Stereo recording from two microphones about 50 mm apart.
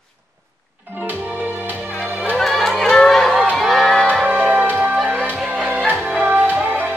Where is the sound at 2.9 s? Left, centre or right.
Centre.